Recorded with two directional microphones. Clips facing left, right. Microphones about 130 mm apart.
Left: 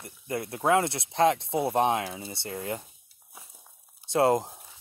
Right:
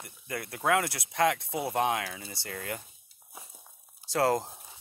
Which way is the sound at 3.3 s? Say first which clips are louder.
Right 2 dB; 15° right (ahead or behind).